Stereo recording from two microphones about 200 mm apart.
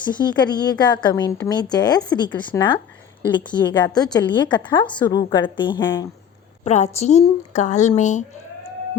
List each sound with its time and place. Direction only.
0.0 s a woman's voice: 20° left (ahead or behind)
6.7 s speech: 35° left (ahead or behind)